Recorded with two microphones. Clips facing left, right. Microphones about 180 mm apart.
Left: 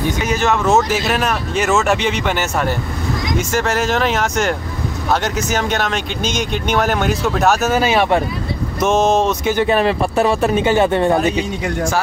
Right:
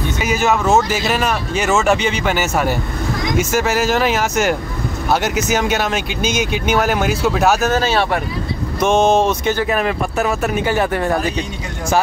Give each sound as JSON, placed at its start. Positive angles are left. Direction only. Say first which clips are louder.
{"t": 0.2, "sound": "speech", "louder": "right 3 dB", "side_deg": -5}
{"t": 7.7, "sound": "speech", "louder": "left 2 dB", "side_deg": 15}
{"t": 8.7, "sound": "speech", "louder": "right 1 dB", "side_deg": 0}
{"t": 9.6, "sound": "speech", "louder": "left 3 dB", "side_deg": 30}